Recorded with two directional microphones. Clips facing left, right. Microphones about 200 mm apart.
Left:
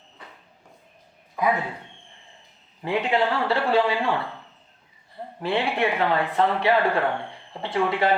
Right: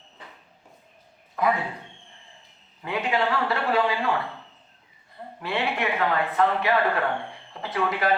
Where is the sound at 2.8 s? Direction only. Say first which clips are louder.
Left 3 dB; 30° left (ahead or behind).